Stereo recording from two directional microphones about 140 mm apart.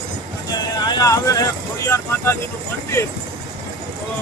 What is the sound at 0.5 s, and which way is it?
Speech, 30° left (ahead or behind).